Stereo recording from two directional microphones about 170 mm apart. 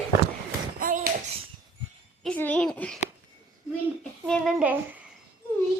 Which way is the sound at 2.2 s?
10° left (ahead or behind).